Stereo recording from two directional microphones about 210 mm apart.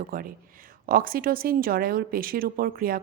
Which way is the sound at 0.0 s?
45° right (ahead or behind).